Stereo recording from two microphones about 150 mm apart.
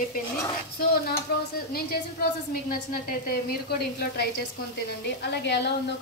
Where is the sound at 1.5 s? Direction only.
90° left.